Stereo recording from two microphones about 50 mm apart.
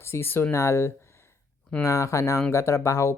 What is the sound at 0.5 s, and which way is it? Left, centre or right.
Speech, left.